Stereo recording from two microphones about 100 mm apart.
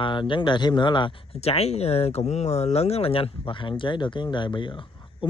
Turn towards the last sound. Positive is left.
turn(degrees=55)  # may be behind; listen again after turning